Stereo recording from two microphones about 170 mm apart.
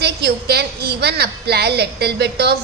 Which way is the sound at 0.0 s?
75° right (ahead or behind).